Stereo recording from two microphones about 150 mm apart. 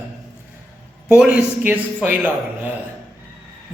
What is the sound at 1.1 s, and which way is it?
A man's voice, 10° right (ahead or behind).